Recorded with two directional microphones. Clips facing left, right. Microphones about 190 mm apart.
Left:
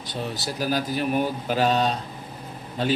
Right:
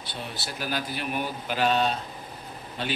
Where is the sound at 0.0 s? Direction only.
40° left (ahead or behind).